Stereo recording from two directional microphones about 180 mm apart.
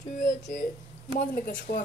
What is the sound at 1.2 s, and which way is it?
Speech, 50° left (ahead or behind).